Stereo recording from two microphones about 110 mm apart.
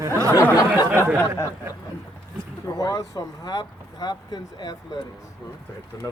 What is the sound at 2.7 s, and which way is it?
Speech, 30° left (ahead or behind).